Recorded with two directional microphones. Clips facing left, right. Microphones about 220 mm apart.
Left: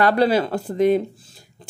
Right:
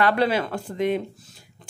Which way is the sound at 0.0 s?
35° left (ahead or behind).